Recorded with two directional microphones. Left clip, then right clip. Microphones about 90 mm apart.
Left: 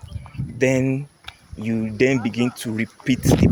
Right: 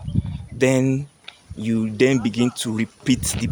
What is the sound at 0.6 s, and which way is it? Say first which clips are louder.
Speech: right 1 dB; 40° right (ahead or behind).